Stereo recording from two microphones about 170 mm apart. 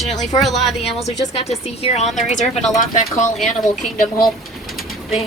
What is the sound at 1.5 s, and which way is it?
Speech, 40° left (ahead or behind).